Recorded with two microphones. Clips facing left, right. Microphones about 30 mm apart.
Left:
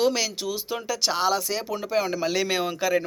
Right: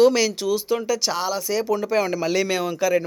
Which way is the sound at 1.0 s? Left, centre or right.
Left.